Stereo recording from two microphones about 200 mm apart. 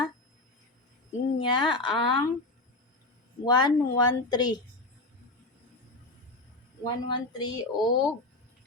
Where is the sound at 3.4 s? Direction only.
20° left (ahead or behind).